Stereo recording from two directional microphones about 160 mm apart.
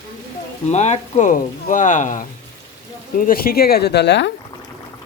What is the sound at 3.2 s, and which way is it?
Speech, 65° left (ahead or behind).